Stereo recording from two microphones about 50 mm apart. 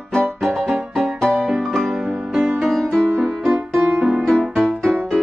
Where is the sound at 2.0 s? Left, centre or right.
Centre.